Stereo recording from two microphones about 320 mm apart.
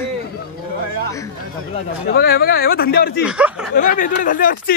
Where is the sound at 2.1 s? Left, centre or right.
Left.